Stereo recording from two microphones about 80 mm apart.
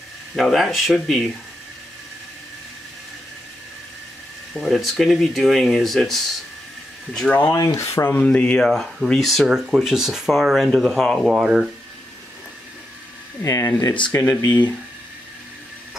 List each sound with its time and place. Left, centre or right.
0.4 s speech: centre
4.6 s speech: centre
7.2 s speech: centre
7.5 s rub: left
8.1 s speech: centre
8.5 s speech: centre
13.4 s rub: left
14.1 s speech: left